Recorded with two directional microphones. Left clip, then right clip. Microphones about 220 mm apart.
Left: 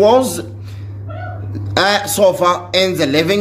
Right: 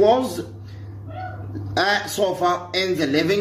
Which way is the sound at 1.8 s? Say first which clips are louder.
Left 7 dB; 45° left (ahead or behind).